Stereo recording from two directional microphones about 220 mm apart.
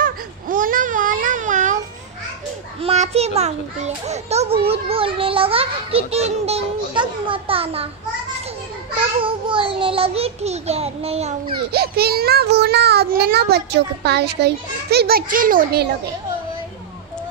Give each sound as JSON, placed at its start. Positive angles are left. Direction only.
{"t": 0.0, "sound": "baby cry", "side_deg": -40}
{"t": 2.8, "sound": "a child's voice", "side_deg": -30}
{"t": 9.2, "sound": "a child's voice", "side_deg": -25}
{"t": 11.7, "sound": "a child's voice", "side_deg": -45}